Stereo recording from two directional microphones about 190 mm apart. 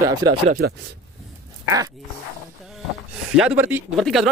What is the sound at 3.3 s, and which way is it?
Speech, 5° right (ahead or behind).